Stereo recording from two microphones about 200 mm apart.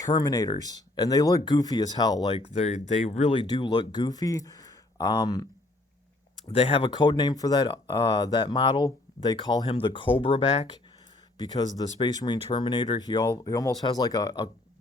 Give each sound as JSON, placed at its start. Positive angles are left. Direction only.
{"t": 0.0, "sound": "speech", "side_deg": 20}
{"t": 2.5, "sound": "speech", "side_deg": 35}
{"t": 6.5, "sound": "speech", "side_deg": 25}
{"t": 11.3, "sound": "speech", "side_deg": 20}